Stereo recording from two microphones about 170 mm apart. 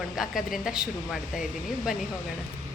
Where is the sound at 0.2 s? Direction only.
Centre (ahead or behind).